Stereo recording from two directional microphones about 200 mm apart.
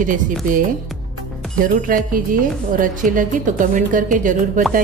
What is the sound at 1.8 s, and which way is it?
A woman's voice, 45° right (ahead or behind).